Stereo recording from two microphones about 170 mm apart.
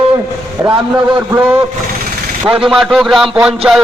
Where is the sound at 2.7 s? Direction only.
Centre (ahead or behind).